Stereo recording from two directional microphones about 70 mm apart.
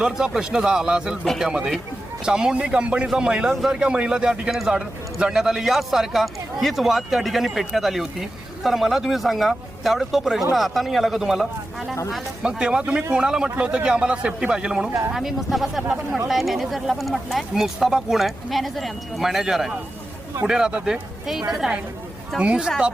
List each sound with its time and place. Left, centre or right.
0.0 s a man's voice: centre